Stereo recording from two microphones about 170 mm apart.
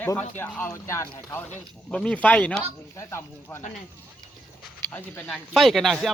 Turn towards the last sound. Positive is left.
turn(degrees=0)  # may be behind; listen again after turning